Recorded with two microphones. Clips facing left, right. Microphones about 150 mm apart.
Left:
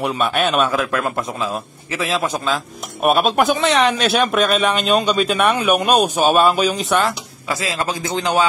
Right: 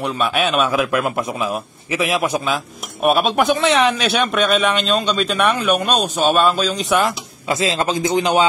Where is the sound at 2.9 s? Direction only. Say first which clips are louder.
Even; centre (ahead or behind).